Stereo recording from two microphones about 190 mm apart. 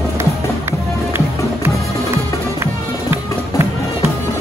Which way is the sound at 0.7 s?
15° right (ahead or behind).